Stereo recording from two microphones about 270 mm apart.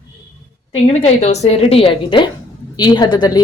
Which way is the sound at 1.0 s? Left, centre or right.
Left.